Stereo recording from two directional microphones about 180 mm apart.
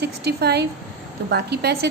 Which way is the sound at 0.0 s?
65° right (ahead or behind).